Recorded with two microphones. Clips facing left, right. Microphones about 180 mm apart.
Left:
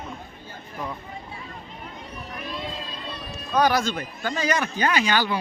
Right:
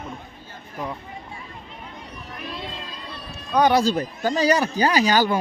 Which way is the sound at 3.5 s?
25° right (ahead or behind).